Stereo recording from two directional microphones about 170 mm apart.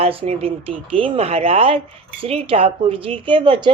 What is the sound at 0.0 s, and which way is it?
Speech, 35° right (ahead or behind).